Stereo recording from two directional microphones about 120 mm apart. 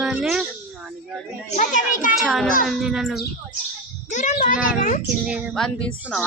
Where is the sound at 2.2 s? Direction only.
Centre (ahead or behind).